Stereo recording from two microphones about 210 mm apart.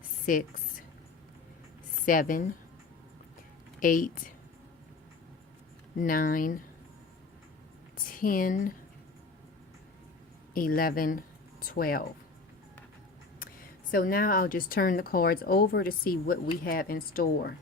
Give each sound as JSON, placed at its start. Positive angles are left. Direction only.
{"t": 0.3, "sound": "speech", "side_deg": 40}
{"t": 2.0, "sound": "speech", "side_deg": 40}
{"t": 3.8, "sound": "speech", "side_deg": 40}
{"t": 6.0, "sound": "speech", "side_deg": 40}
{"t": 8.1, "sound": "speech", "side_deg": 40}
{"t": 10.5, "sound": "speech", "side_deg": 40}
{"t": 13.9, "sound": "speech", "side_deg": 45}